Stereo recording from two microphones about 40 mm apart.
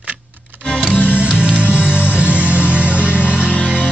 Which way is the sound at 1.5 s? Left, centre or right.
Left.